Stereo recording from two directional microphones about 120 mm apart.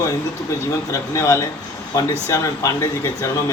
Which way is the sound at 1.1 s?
25° left (ahead or behind).